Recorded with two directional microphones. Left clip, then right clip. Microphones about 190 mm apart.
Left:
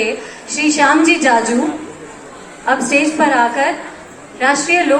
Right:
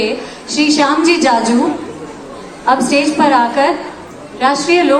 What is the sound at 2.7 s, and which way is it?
A woman's voice, 25° left (ahead or behind).